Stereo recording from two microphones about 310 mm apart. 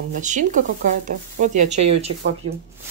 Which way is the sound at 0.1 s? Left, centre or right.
Right.